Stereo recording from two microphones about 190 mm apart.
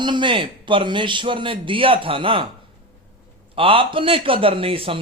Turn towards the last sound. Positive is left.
turn(degrees=-30)  # may be behind; listen again after turning